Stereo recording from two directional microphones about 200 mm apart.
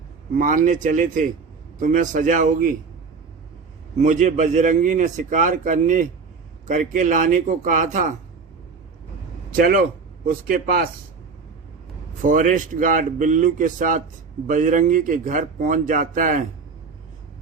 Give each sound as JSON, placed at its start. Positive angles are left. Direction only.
{"t": 0.3, "sound": "a man's voice", "side_deg": -40}
{"t": 3.9, "sound": "a man's voice", "side_deg": -40}
{"t": 9.5, "sound": "a man's voice", "side_deg": -45}
{"t": 12.2, "sound": "a man's voice", "side_deg": -40}